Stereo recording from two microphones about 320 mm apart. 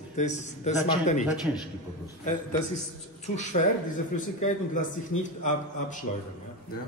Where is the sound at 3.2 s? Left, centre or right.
Left.